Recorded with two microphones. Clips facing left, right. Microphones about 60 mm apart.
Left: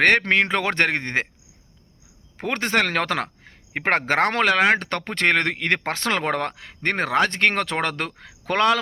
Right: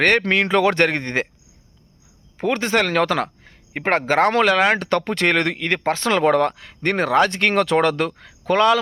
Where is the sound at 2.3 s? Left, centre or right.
Left.